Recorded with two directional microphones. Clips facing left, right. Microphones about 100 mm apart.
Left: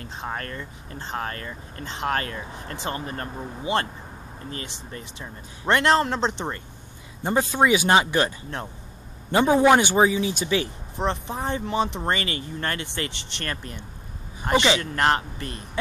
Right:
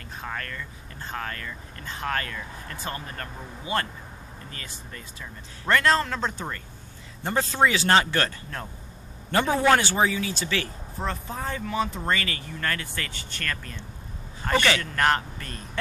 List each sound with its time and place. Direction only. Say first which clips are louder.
0.0 s speech: left 3 dB; 30° left (ahead or behind)
4.9 s speech: left 3 dB; 25° left (ahead or behind)